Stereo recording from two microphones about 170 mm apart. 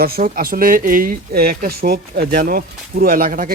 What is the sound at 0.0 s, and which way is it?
Speech, 60° right (ahead or behind).